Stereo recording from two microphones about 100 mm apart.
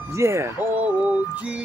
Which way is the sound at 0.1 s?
30° right (ahead or behind).